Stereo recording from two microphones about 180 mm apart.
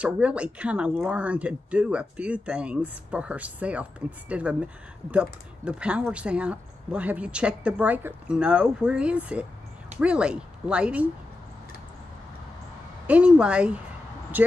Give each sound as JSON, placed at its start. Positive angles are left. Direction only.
{"t": 0.0, "sound": "speech", "side_deg": -5}
{"t": 13.0, "sound": "speech", "side_deg": -5}